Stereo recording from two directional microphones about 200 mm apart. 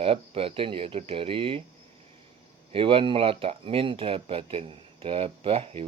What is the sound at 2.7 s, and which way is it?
Speech, 25° right (ahead or behind).